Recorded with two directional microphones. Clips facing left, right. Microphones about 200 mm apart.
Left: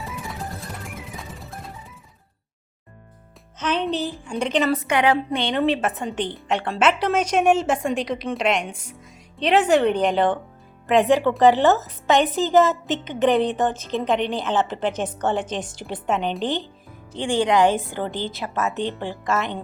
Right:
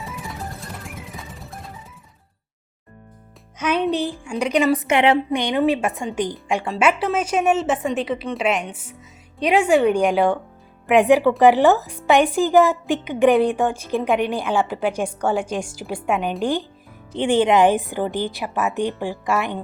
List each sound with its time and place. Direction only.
0.0 s music: centre (ahead or behind)
3.6 s a woman's voice: 10° right (ahead or behind)
5.3 s a woman's voice: 15° right (ahead or behind)
17.2 s a woman's voice: 20° right (ahead or behind)